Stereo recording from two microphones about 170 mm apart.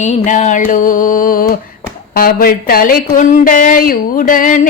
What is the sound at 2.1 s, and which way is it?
Speech, 60° left (ahead or behind).